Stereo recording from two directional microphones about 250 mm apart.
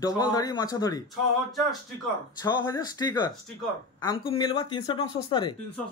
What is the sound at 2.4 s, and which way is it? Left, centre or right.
Speech, centre.